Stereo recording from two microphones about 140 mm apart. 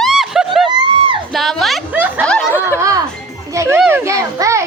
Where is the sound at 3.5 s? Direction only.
20° right (ahead or behind).